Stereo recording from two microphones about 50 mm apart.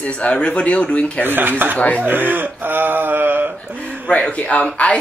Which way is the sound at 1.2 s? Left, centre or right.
Right.